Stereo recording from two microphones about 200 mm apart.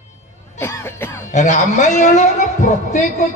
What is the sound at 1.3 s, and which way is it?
A man's voice, 35° left (ahead or behind).